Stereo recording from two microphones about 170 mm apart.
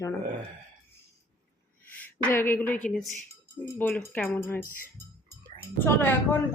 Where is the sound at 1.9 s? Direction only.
10° left (ahead or behind).